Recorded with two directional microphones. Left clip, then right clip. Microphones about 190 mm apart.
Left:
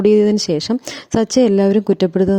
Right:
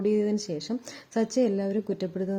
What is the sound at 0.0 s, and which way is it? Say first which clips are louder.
Speech: left 13 dB; 45° left (ahead or behind).